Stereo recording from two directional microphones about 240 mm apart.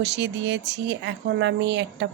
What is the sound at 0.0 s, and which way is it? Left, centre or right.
Speech, right.